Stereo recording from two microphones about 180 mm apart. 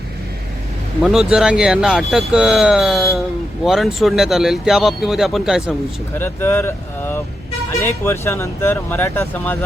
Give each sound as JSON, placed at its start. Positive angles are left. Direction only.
{"t": 1.0, "sound": "speech", "side_deg": -5}
{"t": 6.1, "sound": "speech", "side_deg": 10}